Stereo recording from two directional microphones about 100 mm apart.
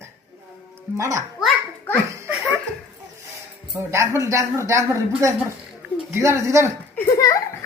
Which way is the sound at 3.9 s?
30° right (ahead or behind).